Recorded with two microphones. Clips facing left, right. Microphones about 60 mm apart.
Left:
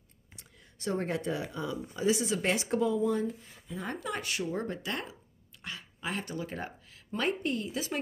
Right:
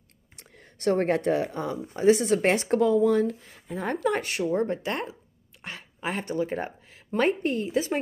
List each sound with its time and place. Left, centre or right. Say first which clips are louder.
0.4 s speech: right 10 dB; right